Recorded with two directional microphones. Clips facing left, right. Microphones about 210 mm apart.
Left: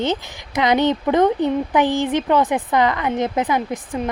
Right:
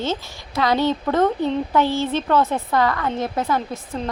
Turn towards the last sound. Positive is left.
turn(degrees=15)  # may be behind; listen again after turning